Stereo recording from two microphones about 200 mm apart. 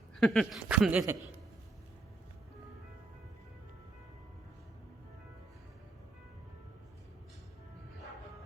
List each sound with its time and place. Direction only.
0.2 s speech: centre (ahead or behind)